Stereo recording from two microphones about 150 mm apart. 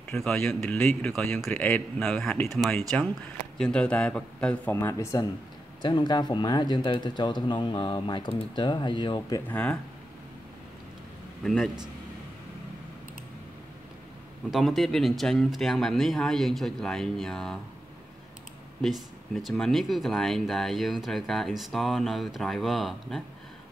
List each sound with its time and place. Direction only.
0.1 s speech: 10° left (ahead or behind)
3.5 s speech: 5° left (ahead or behind)
5.8 s speech: 30° left (ahead or behind)
9.5 s speech: 10° left (ahead or behind)
11.4 s speech: centre (ahead or behind)
14.5 s speech: centre (ahead or behind)
18.8 s speech: centre (ahead or behind)